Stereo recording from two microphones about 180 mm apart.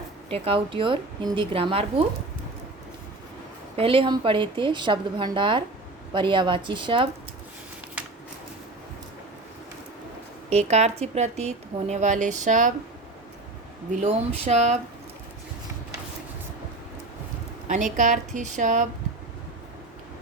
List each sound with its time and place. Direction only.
0.3 s a woman's voice: 30° right (ahead or behind)
3.8 s a woman's voice: 30° right (ahead or behind)
10.5 s a woman's voice: 40° right (ahead or behind)
13.9 s a woman's voice: 40° right (ahead or behind)
17.7 s a woman's voice: 45° right (ahead or behind)